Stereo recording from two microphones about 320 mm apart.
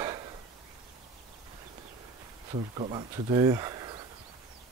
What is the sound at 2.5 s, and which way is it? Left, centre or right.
Speech, centre.